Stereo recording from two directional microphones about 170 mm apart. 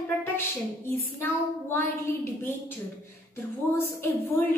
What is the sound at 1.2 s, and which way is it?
A woman's voice, 10° left (ahead or behind).